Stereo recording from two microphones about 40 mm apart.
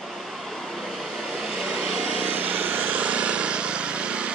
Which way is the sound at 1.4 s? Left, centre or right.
Centre.